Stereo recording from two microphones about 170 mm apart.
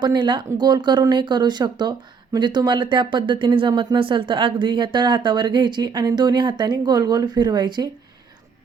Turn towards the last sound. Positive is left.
turn(degrees=-25)  # may be behind; listen again after turning